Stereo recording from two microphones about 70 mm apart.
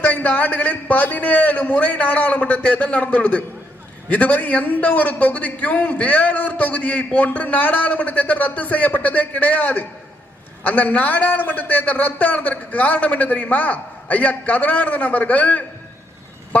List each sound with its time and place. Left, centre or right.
0.0 s a man's voice: left